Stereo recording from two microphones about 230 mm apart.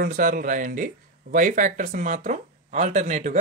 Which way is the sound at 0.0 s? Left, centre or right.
Right.